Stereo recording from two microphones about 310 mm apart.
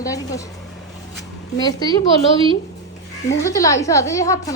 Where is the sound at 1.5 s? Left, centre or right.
Centre.